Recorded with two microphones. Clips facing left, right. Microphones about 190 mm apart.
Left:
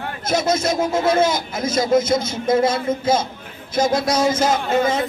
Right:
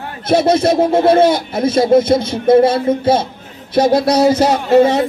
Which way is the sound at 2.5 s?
30° right (ahead or behind).